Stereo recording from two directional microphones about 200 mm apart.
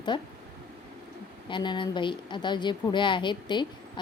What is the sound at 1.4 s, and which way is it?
A woman's voice, 25° left (ahead or behind).